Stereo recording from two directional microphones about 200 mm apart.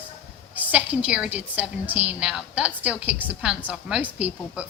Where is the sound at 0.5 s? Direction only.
10° right (ahead or behind).